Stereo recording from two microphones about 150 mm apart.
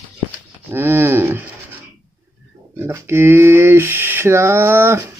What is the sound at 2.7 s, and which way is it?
Speech, 15° right (ahead or behind).